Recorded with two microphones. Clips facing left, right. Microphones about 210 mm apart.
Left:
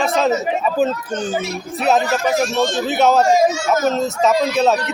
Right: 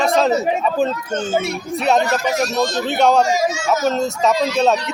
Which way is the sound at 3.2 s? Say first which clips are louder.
Left 4 dB; 55° left (ahead or behind).